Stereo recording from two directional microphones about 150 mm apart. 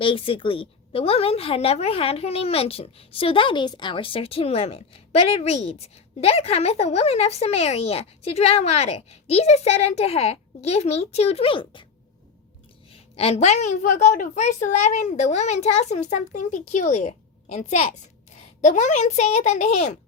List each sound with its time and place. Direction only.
0.0 s a woman's voice: 35° left (ahead or behind)
12.9 s a woman's voice: 40° left (ahead or behind)